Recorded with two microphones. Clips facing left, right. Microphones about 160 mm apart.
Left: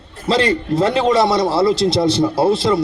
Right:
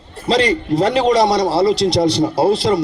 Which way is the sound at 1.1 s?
25° left (ahead or behind).